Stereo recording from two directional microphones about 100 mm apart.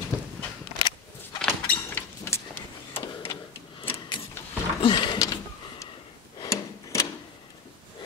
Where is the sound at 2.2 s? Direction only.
25° left (ahead or behind).